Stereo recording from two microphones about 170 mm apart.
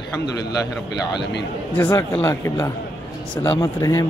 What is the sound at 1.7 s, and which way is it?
A man's voice, 20° left (ahead or behind).